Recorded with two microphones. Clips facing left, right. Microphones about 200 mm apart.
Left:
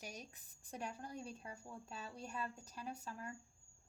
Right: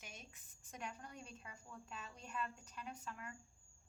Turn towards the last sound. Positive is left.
turn(degrees=35)  # may be behind; listen again after turning